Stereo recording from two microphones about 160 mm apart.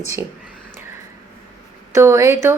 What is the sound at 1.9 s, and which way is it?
Speech, 15° right (ahead or behind).